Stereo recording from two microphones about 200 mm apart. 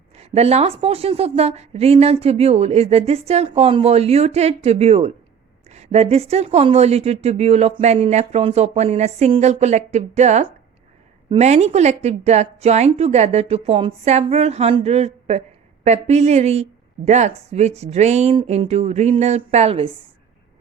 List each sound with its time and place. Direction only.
0.2 s a woman's voice: 30° right (ahead or behind)